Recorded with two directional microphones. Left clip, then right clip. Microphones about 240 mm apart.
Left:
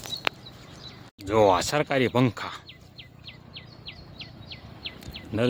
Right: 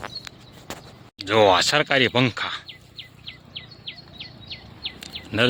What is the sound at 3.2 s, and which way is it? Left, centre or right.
Insect, right.